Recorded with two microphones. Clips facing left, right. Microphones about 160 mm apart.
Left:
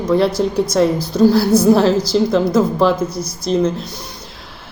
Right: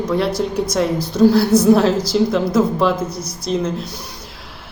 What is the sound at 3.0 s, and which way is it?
Speech, 30° left (ahead or behind).